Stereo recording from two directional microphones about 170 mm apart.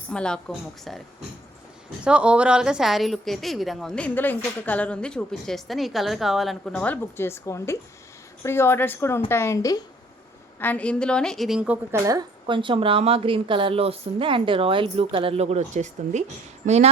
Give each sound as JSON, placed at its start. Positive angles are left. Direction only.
{"t": 0.1, "sound": "a woman's voice", "side_deg": 5}
{"t": 2.0, "sound": "a woman's voice", "side_deg": -5}
{"t": 10.6, "sound": "a woman's voice", "side_deg": 10}
{"t": 12.0, "sound": "a woman's voice", "side_deg": -25}